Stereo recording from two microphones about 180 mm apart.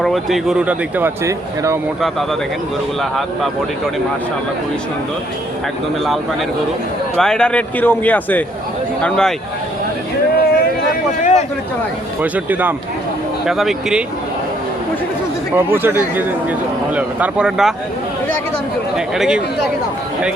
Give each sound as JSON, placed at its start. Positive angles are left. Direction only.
{"t": 0.0, "sound": "speech", "side_deg": 0}
{"t": 3.0, "sound": "speech", "side_deg": 0}
{"t": 7.2, "sound": "speech", "side_deg": 5}
{"t": 10.3, "sound": "a sound", "side_deg": 50}
{"t": 12.2, "sound": "speech", "side_deg": -10}
{"t": 15.5, "sound": "speech", "side_deg": -10}
{"t": 18.9, "sound": "speech", "side_deg": 0}